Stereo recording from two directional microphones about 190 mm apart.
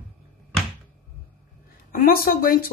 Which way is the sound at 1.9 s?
50° left (ahead or behind).